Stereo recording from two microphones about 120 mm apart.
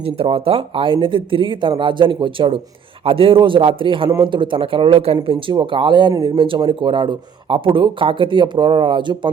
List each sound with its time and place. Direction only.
0.0 s speech: 50° right (ahead or behind)